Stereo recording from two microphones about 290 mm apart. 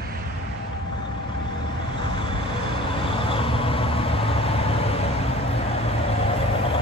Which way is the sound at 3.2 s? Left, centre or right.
Centre.